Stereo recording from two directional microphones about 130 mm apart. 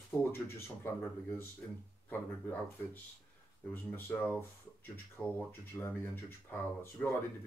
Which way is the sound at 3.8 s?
15° left (ahead or behind).